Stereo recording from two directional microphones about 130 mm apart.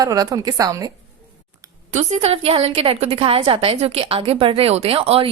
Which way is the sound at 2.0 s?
60° right (ahead or behind).